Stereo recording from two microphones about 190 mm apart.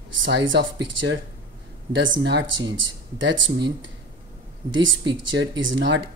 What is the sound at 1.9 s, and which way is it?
Speech, 75° right (ahead or behind).